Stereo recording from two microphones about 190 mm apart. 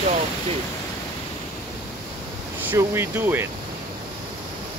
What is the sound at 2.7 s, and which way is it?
Speech, 10° right (ahead or behind).